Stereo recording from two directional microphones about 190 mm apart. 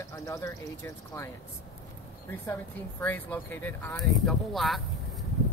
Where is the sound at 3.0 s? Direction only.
10° left (ahead or behind).